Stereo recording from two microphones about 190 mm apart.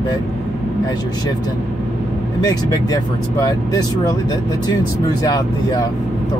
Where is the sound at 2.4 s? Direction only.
20° left (ahead or behind).